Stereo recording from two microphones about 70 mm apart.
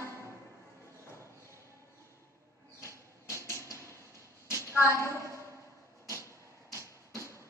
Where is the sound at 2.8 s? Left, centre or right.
Left.